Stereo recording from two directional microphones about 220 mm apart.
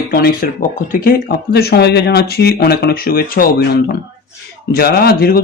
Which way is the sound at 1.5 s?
45° left (ahead or behind).